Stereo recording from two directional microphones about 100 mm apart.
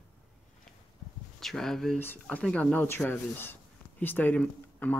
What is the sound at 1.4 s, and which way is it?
Mantra, 5° left (ahead or behind).